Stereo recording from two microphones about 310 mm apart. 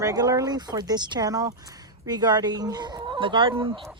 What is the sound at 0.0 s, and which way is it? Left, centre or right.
Speech, centre.